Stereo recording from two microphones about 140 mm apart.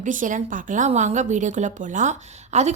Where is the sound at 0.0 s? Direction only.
65° right (ahead or behind).